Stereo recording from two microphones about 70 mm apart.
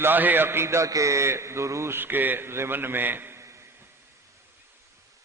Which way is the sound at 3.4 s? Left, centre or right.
Right.